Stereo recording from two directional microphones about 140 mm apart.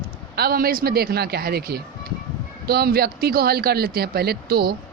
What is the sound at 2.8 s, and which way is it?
Speech, 90° right.